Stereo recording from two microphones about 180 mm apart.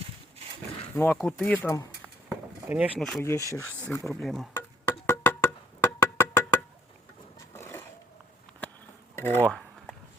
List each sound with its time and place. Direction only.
0.9 s speech: 10° left (ahead or behind)
2.6 s speech: 10° right (ahead or behind)
3.0 s speech: centre (ahead or behind)
3.2 s speech: 15° left (ahead or behind)
5.0 s music: 10° left (ahead or behind)
7.5 s a sound: 15° left (ahead or behind)
9.1 s a sound: 10° left (ahead or behind)